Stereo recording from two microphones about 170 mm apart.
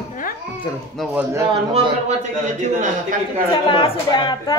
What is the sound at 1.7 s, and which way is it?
A man's voice, 40° right (ahead or behind).